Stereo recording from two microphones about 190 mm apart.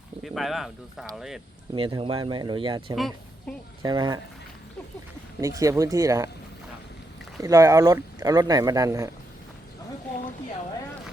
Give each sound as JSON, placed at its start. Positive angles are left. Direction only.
{"t": 0.2, "sound": "speech", "side_deg": 0}
{"t": 1.7, "sound": "speech", "side_deg": -25}
{"t": 2.9, "sound": "speech", "side_deg": 0}
{"t": 3.8, "sound": "speech", "side_deg": -20}
{"t": 5.4, "sound": "speech", "side_deg": -15}
{"t": 7.4, "sound": "speech", "side_deg": -15}